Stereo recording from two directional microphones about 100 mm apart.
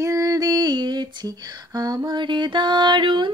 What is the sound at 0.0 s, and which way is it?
Female singing, 35° right (ahead or behind).